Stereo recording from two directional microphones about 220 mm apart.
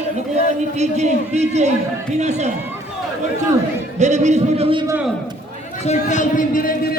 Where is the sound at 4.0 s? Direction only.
30° right (ahead or behind).